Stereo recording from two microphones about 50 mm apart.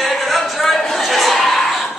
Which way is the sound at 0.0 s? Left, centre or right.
Centre.